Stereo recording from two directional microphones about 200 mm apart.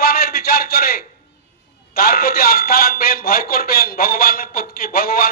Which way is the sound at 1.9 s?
50° left (ahead or behind).